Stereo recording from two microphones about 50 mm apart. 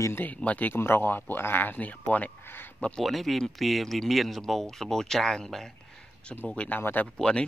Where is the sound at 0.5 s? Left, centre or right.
Left.